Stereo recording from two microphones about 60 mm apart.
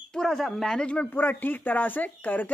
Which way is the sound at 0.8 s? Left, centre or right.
Left.